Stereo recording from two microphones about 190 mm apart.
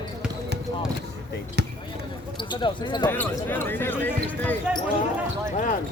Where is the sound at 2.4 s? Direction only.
25° left (ahead or behind).